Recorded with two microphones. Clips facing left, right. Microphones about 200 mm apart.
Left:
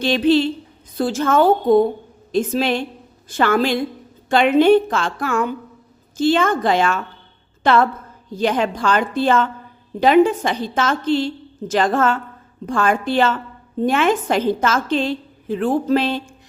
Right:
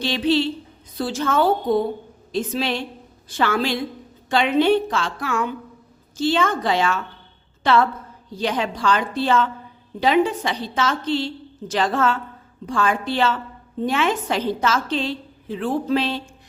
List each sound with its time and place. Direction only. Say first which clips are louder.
0.0 s a woman's voice: left 4 dB; 50° left (ahead or behind)